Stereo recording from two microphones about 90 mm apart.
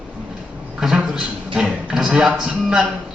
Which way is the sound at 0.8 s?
5° right (ahead or behind).